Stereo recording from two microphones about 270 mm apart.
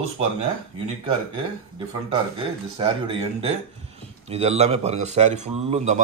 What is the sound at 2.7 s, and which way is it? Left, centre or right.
A man's voice, right.